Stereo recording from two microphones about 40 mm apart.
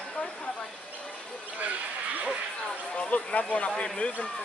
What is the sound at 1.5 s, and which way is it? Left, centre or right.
Speech, right.